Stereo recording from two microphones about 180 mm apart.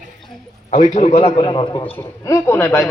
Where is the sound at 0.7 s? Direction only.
40° left (ahead or behind).